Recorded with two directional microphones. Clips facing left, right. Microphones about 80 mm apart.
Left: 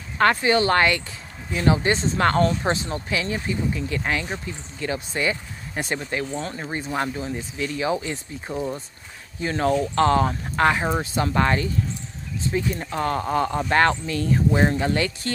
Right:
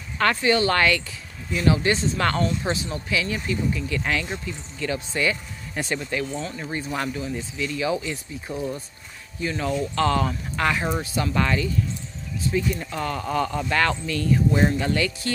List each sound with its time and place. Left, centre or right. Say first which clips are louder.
0.2 s speech: left 2 dB; left
9.4 s speech: left 4 dB; left
10.0 s speech: left 3 dB; left